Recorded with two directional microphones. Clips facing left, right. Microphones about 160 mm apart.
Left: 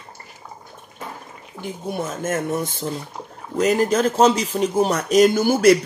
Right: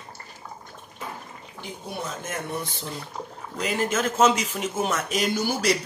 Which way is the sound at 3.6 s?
40° left (ahead or behind).